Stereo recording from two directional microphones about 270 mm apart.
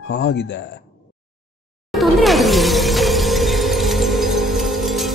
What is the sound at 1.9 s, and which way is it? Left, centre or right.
Shatter, centre.